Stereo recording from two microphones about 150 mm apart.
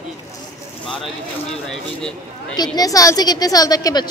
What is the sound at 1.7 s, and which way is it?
Speech, 5° left (ahead or behind).